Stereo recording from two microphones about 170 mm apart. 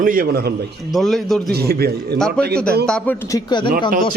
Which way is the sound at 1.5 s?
65° right (ahead or behind).